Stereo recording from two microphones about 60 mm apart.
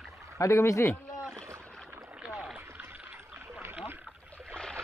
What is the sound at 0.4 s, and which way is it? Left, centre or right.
Speech, left.